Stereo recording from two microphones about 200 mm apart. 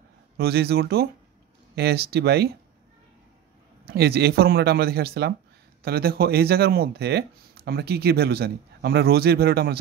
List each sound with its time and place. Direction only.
0.4 s speech: 55° right (ahead or behind)
3.8 s speech: 50° right (ahead or behind)